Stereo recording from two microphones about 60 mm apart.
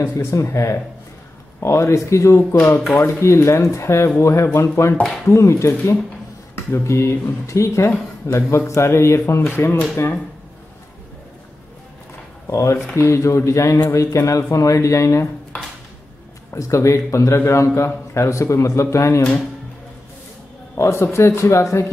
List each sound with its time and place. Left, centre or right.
0.3 s a man's voice: left
4.9 s speech: centre
5.2 s a man's voice: left
8.3 s speech: left
9.5 s speech: left
12.4 s a man's voice: left
16.5 s a man's voice: left
20.7 s speech: left